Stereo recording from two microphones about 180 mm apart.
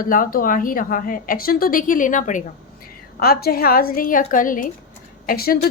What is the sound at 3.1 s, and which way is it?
A woman's voice, 55° left (ahead or behind).